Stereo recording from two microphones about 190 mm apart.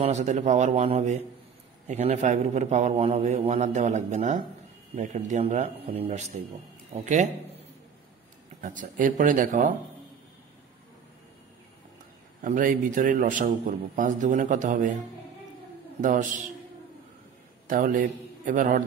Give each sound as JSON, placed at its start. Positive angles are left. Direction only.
{"t": 0.0, "sound": "a man's voice", "side_deg": -40}
{"t": 8.5, "sound": "a man's voice", "side_deg": -45}
{"t": 12.4, "sound": "a man's voice", "side_deg": -45}
{"t": 16.0, "sound": "a man's voice", "side_deg": -40}
{"t": 17.6, "sound": "a man's voice", "side_deg": -45}